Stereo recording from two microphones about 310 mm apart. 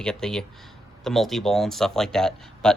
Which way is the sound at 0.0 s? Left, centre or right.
Centre.